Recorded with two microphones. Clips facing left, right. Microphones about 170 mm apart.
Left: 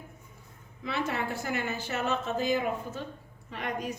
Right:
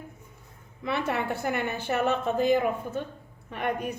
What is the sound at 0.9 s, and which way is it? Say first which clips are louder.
A woman's voice: right 3 dB; 60° right (ahead or behind).